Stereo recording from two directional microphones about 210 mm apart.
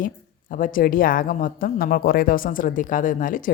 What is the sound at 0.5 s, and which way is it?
Speech, 40° left (ahead or behind).